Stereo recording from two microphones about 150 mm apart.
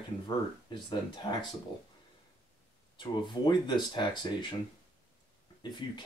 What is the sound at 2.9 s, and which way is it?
Speech, 30° left (ahead or behind).